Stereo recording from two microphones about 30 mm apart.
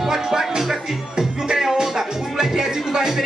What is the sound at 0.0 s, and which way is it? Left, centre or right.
Music, centre.